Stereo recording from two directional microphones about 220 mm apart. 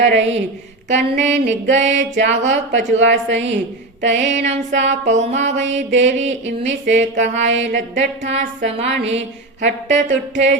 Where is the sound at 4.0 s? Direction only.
55° right (ahead or behind).